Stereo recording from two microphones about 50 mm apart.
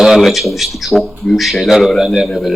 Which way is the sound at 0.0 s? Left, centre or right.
Centre.